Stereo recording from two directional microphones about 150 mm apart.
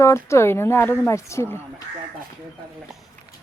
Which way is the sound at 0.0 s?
20° left (ahead or behind).